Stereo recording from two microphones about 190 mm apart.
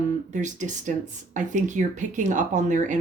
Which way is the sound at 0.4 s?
40° right (ahead or behind).